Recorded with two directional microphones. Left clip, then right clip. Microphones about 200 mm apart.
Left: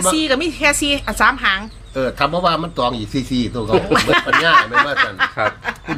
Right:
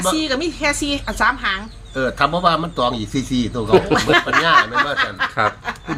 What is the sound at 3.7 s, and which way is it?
Speech, 30° right (ahead or behind).